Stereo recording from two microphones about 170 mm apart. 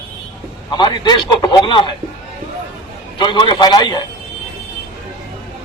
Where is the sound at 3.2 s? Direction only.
30° left (ahead or behind).